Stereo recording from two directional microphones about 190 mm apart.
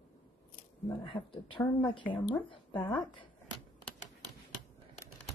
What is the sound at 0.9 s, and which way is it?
Speech, 25° left (ahead or behind).